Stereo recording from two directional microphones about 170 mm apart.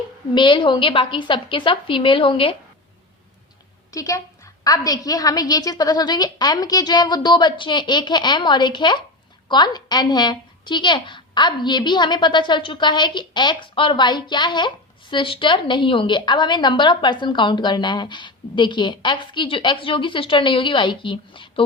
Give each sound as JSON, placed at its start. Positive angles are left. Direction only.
{"t": 0.3, "sound": "a woman's voice", "side_deg": 30}
{"t": 3.9, "sound": "a woman's voice", "side_deg": 20}